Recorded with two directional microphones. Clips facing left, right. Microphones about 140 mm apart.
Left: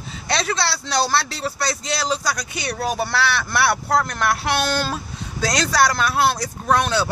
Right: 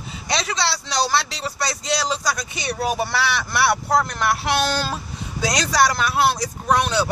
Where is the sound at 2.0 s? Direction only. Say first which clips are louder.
Left 1 dB; 5° right (ahead or behind).